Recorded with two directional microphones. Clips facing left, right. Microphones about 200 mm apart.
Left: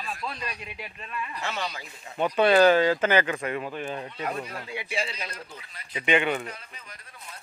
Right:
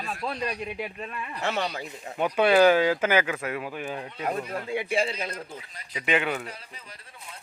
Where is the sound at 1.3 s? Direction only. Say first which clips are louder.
Right 7 dB; 60° right (ahead or behind).